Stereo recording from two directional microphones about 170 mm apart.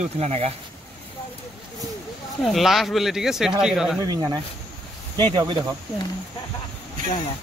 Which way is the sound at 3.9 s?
20° right (ahead or behind).